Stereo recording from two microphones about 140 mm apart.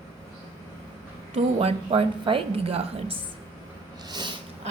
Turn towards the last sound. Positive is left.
turn(degrees=-30)  # may be behind; listen again after turning